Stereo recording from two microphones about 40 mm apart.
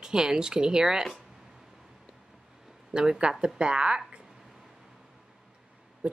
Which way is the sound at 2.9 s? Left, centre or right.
Centre.